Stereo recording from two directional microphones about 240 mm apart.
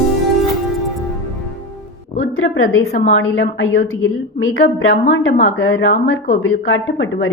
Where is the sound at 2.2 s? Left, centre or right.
Left.